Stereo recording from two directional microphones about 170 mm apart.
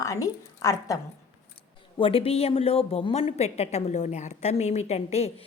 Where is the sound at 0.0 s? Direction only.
20° left (ahead or behind).